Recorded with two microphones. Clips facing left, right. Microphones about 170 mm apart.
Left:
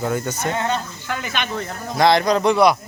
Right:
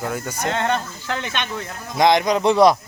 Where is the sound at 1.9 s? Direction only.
15° right (ahead or behind).